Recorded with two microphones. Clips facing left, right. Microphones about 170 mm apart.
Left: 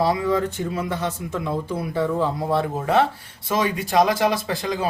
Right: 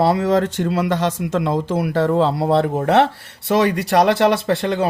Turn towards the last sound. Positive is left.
turn(degrees=-65)  # may be behind; listen again after turning